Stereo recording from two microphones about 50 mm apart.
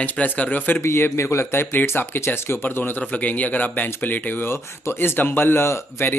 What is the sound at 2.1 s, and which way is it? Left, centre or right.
Speech, left.